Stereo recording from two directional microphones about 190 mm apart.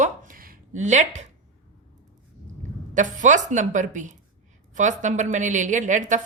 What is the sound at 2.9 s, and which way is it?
Speech, 40° right (ahead or behind).